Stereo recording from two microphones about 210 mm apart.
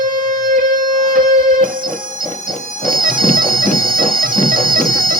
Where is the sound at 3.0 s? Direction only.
40° right (ahead or behind).